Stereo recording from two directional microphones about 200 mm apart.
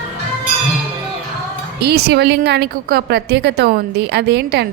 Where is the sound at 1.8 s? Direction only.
55° right (ahead or behind).